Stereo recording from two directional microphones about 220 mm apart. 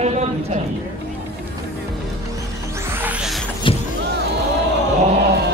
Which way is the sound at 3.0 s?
5° right (ahead or behind).